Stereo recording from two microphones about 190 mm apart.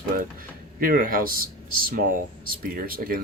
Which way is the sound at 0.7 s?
45° right (ahead or behind).